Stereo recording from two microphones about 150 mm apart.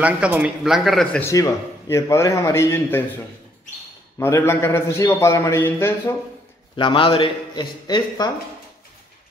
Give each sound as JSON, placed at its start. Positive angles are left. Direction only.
{"t": 0.0, "sound": "speech", "side_deg": -10}
{"t": 1.2, "sound": "a man's voice", "side_deg": 20}
{"t": 4.2, "sound": "a man's voice", "side_deg": 15}
{"t": 6.8, "sound": "a man's voice", "side_deg": 35}